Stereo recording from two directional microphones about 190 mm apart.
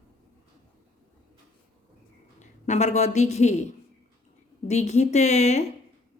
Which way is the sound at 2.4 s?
40° left (ahead or behind).